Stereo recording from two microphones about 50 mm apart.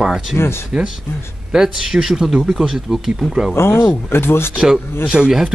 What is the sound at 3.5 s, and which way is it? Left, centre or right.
Speech, left.